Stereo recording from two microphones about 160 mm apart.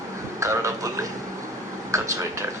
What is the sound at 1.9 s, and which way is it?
Speech, 20° right (ahead or behind).